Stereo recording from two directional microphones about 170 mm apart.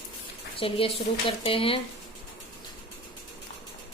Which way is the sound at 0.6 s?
35° left (ahead or behind).